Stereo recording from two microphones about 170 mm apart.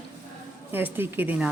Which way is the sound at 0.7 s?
10° right (ahead or behind).